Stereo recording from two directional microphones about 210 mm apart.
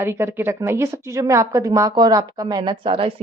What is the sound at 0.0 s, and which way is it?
A woman's voice, 10° right (ahead or behind).